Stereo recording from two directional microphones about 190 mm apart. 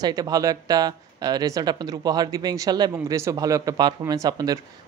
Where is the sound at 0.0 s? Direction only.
20° right (ahead or behind).